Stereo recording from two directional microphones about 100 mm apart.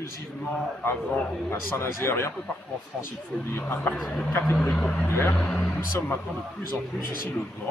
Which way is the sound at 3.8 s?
5° left (ahead or behind).